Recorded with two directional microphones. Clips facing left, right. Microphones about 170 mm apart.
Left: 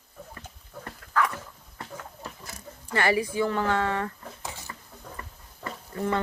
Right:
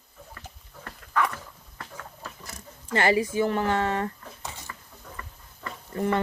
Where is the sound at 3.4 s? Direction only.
20° right (ahead or behind).